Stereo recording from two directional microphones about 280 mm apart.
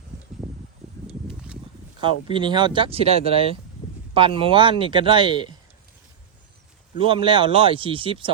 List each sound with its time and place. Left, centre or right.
0.8 s a sound: centre
2.0 s a man's voice: centre
7.0 s speech: centre